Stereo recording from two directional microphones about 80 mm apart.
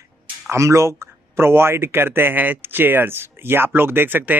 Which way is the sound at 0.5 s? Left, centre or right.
Right.